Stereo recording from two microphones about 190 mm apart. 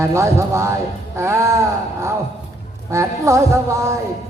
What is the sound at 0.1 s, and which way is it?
Speech, 15° right (ahead or behind).